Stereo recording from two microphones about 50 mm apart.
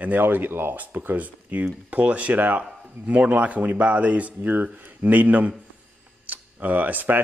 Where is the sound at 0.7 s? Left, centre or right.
Right.